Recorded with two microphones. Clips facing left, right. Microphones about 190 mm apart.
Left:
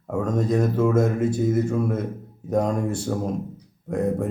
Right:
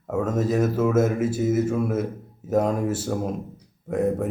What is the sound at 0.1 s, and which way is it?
Speech, 5° right (ahead or behind).